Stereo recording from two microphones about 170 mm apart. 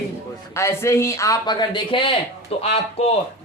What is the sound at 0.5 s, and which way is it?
Speech, 15° left (ahead or behind).